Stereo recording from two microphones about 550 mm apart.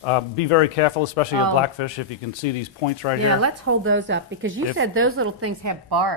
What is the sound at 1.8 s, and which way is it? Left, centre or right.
Speech, left.